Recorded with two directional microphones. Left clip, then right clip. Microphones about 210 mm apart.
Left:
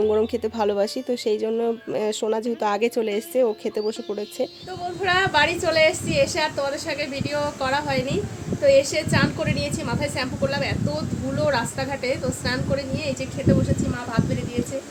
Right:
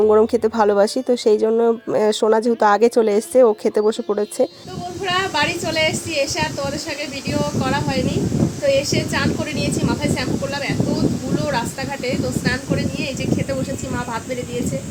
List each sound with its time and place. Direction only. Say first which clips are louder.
0.1 s speech: right 7 dB; 20° right (ahead or behind)
5.0 s a woman's voice: even; centre (ahead or behind)
12.0 s a woman's voice: right 5 dB; 5° right (ahead or behind)